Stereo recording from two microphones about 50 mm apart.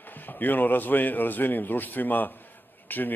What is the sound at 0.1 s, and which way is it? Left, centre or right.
Speech, left.